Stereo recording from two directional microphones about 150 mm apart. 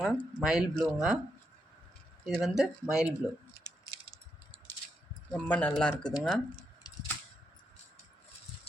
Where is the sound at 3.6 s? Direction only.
25° left (ahead or behind).